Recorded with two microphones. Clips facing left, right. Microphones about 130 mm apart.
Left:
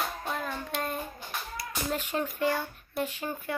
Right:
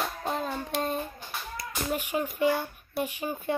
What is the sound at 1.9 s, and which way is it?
A child's voice, 15° right (ahead or behind).